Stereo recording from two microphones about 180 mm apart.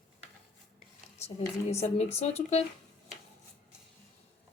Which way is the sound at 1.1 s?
35° left (ahead or behind).